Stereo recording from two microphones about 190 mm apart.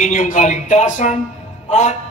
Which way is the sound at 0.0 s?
45° left (ahead or behind).